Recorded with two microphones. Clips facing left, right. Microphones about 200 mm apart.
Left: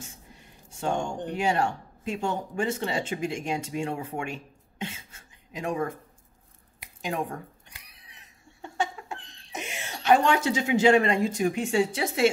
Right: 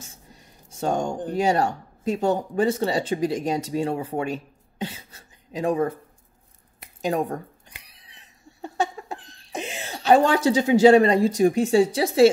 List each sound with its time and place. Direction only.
0.0 s a sound: 40° right (ahead or behind)
1.3 s speech: 40° right (ahead or behind)
7.0 s speech: 40° right (ahead or behind)
7.8 s cat: 30° right (ahead or behind)
9.5 s wail: 30° right (ahead or behind)
10.0 s speech: 35° right (ahead or behind)